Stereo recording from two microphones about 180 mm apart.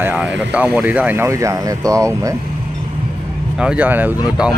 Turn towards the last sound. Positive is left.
turn(degrees=-5)  # may be behind; listen again after turning